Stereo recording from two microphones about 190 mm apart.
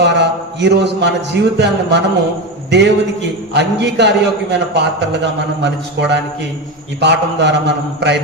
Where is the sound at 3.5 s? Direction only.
65° right (ahead or behind).